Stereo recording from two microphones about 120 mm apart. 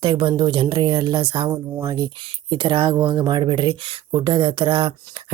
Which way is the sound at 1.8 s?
30° right (ahead or behind).